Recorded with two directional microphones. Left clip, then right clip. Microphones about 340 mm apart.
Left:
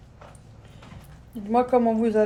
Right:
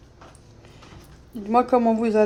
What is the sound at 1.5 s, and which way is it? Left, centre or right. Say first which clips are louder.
Speech: right 2 dB; right.